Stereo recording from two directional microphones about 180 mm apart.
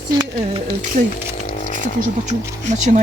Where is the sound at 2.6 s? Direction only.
40° right (ahead or behind).